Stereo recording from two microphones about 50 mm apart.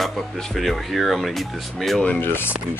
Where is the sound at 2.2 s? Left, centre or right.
Left.